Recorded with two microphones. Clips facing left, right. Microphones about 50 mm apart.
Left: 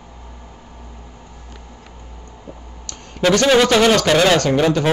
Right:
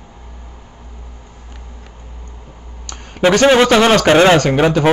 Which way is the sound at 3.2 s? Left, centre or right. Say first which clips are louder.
Right 3 dB; right.